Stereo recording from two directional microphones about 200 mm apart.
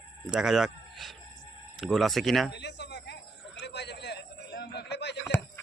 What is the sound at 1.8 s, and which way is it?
Speech, centre (ahead or behind).